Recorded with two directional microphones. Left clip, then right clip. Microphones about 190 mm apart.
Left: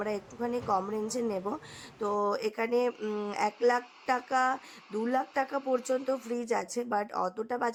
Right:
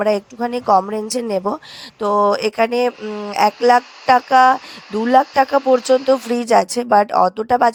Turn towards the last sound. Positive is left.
turn(degrees=-45)  # may be behind; listen again after turning